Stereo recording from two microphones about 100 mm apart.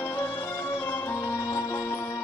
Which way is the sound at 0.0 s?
20° left (ahead or behind).